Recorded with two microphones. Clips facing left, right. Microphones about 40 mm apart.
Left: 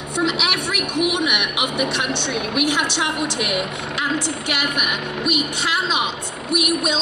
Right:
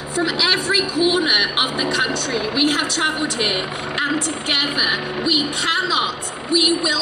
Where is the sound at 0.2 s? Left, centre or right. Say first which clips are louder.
Even; centre.